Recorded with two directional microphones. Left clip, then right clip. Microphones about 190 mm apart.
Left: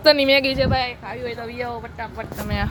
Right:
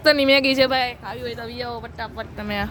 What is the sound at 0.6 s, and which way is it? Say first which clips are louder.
Speech: right 3 dB; 55° right (ahead or behind).